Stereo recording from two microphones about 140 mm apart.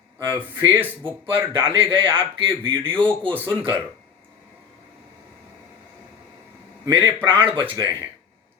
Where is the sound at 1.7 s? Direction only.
40° right (ahead or behind).